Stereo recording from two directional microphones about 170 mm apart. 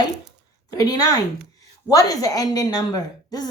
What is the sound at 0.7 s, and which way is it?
Speech, 20° left (ahead or behind).